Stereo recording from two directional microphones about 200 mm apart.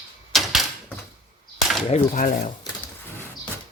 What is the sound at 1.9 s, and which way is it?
Speech, 35° left (ahead or behind).